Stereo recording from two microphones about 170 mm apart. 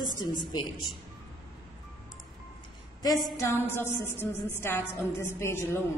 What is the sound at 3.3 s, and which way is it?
A woman's voice, 15° left (ahead or behind).